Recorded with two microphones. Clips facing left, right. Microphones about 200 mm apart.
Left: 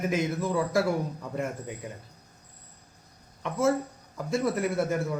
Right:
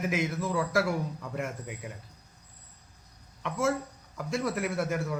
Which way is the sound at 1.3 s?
35° left (ahead or behind).